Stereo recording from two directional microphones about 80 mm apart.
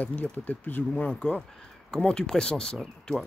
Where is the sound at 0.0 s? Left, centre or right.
Centre.